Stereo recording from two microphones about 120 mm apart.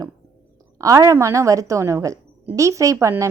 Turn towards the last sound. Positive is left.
turn(degrees=-25)  # may be behind; listen again after turning